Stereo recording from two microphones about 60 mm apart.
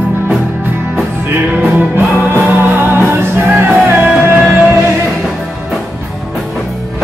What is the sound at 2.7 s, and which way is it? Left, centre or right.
Music, right.